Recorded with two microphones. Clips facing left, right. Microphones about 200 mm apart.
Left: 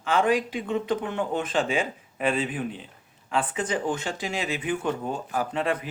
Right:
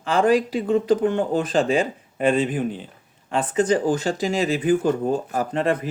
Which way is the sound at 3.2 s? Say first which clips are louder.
Right 7 dB; 40° right (ahead or behind).